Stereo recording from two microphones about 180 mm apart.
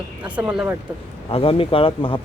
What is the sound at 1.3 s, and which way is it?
Speech, 30° left (ahead or behind).